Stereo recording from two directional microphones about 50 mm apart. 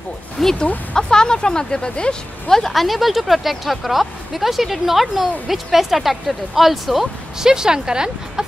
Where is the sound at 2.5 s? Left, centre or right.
Centre.